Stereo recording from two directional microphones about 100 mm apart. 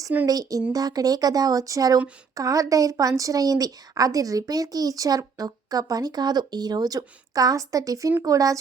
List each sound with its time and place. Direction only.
0.3 s a woman's voice: 40° right (ahead or behind)